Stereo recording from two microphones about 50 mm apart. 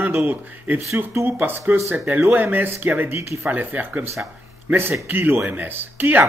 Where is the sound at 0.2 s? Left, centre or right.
Right.